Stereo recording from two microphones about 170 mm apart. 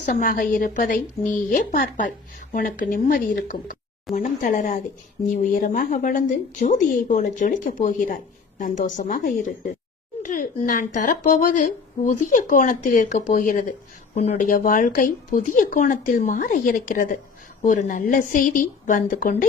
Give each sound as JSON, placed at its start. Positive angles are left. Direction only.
{"t": 0.0, "sound": "a woman's voice", "side_deg": 50}